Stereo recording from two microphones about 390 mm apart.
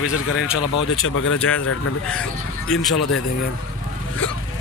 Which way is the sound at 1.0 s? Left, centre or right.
Left.